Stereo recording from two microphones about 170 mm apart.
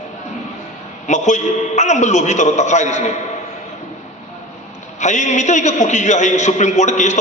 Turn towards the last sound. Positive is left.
turn(degrees=45)  # may be behind; listen again after turning